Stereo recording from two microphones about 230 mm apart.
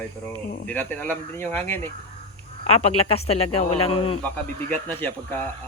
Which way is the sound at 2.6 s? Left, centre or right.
Left.